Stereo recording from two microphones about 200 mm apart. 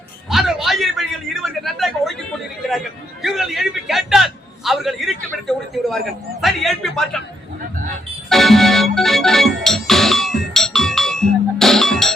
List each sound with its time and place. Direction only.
0.3 s a sound: centre (ahead or behind)
2.6 s a man's voice: centre (ahead or behind)
8.3 s music: centre (ahead or behind)